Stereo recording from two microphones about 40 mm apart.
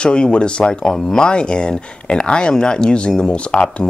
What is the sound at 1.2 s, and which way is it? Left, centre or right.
Speech, left.